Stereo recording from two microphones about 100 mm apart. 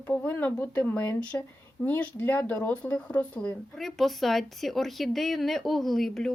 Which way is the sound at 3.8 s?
Centre (ahead or behind).